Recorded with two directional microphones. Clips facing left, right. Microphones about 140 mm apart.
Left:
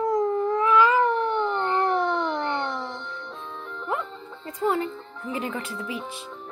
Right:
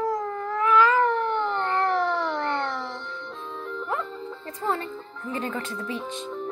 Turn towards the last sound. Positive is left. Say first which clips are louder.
# right 1 dB
turn(degrees=10)  # may be behind; listen again after turning